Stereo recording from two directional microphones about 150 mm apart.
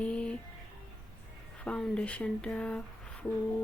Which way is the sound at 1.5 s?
10° left (ahead or behind).